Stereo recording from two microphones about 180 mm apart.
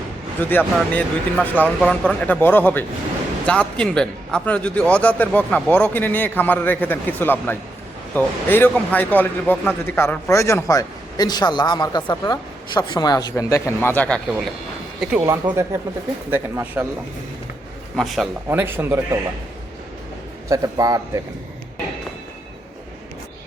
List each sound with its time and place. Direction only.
0.3 s a man's voice: 10° left (ahead or behind)
14.3 s a man's voice: 5° right (ahead or behind)
17.9 s a man's voice: centre (ahead or behind)
18.4 s speech: 10° right (ahead or behind)
20.5 s a man's voice: 20° right (ahead or behind)